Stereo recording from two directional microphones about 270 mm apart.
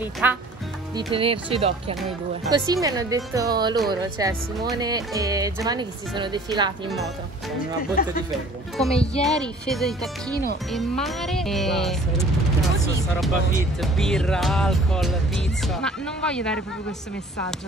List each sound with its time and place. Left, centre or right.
0.0 s speech: centre
0.9 s speech: centre
8.0 s speech: left
8.7 s speech: centre
13.6 s speech: centre